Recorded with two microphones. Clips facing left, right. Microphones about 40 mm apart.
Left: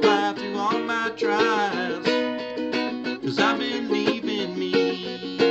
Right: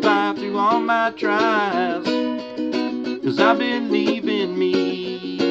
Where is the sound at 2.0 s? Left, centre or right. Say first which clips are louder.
Right 1 dB; centre.